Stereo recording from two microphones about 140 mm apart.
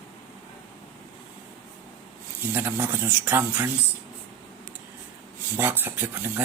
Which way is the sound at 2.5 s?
15° right (ahead or behind).